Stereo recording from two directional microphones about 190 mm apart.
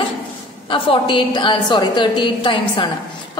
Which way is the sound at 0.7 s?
30° left (ahead or behind).